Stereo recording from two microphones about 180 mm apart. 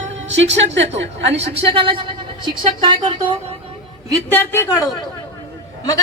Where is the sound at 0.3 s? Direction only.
85° right.